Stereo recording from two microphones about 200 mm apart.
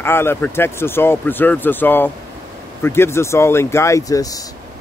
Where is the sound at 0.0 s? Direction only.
10° left (ahead or behind).